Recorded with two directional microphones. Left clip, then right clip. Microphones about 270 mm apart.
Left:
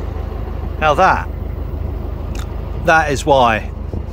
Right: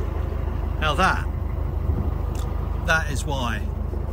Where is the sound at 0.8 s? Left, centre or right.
Centre.